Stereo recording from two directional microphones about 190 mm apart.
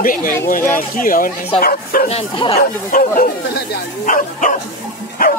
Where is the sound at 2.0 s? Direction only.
30° left (ahead or behind).